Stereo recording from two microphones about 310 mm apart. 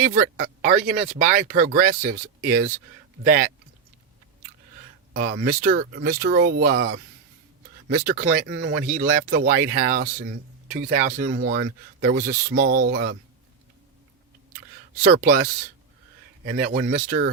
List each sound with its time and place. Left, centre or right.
0.0 s speech: right
5.1 s speech: right
15.0 s speech: right
16.5 s speech: right